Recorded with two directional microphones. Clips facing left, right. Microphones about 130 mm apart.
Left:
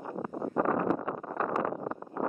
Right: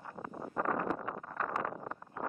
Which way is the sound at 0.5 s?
25° left (ahead or behind).